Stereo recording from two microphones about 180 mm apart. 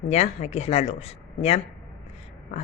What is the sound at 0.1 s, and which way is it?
Speech, 35° left (ahead or behind).